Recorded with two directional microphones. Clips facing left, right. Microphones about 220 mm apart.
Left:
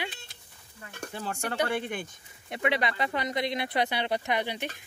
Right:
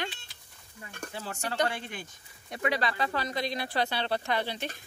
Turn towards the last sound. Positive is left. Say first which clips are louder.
# left 1 dB
turn(degrees=15)  # may be behind; listen again after turning